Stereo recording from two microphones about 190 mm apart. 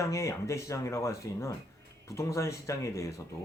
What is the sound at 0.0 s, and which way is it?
Speech, 15° left (ahead or behind).